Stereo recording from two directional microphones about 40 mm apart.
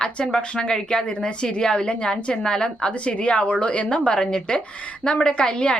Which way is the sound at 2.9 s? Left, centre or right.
Left.